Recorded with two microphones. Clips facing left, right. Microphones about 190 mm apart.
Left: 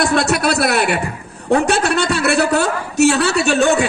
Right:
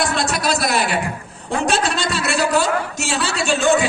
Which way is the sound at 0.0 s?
60° left (ahead or behind).